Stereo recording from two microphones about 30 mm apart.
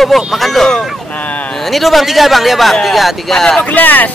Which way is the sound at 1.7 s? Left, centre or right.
Centre.